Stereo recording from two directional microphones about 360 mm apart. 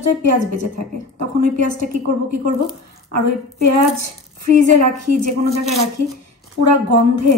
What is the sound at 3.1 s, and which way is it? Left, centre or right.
A woman's voice, right.